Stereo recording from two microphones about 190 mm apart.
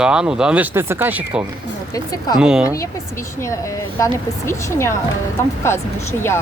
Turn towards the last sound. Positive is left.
turn(degrees=15)  # may be behind; listen again after turning